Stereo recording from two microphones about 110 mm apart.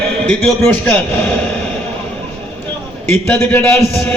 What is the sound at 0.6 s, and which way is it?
Speech, 15° left (ahead or behind).